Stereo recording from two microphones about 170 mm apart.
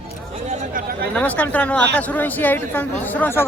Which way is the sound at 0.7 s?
55° right (ahead or behind).